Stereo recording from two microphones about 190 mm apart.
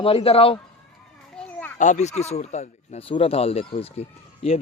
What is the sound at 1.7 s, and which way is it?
Speech, 40° left (ahead or behind).